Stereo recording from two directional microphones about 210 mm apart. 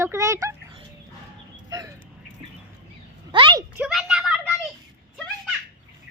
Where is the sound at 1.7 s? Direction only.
15° right (ahead or behind).